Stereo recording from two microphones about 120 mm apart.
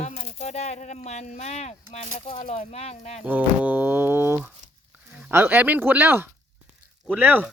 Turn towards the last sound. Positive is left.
turn(degrees=-15)  # may be behind; listen again after turning